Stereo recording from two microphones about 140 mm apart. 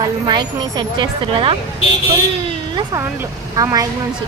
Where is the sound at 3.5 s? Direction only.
25° right (ahead or behind).